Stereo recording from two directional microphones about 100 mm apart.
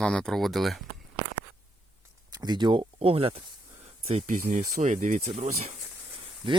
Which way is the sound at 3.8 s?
90° right.